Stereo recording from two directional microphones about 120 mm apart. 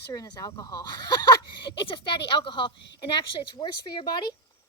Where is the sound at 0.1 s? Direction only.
30° left (ahead or behind).